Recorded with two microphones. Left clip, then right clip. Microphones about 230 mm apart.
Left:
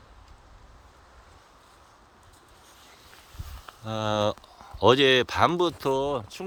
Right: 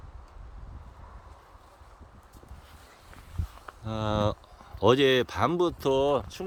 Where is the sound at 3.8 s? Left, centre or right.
Centre.